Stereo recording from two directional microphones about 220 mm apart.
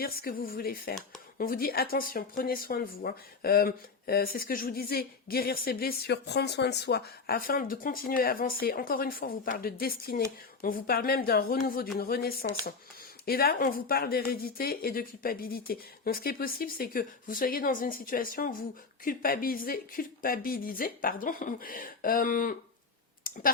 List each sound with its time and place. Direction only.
0.0 s speech: 40° left (ahead or behind)
23.2 s clicking: 40° left (ahead or behind)